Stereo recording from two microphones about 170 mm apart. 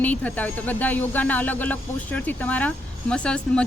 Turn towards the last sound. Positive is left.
turn(degrees=5)  # may be behind; listen again after turning